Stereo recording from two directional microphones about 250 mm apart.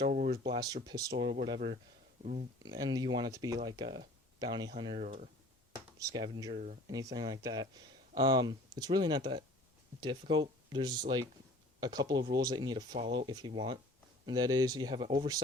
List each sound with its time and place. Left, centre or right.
0.0 s speech: right
2.2 s speech: right
2.6 s speech: centre
6.0 s speech: centre